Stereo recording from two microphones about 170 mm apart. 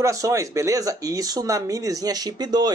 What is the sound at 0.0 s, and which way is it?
Speech, 20° right (ahead or behind).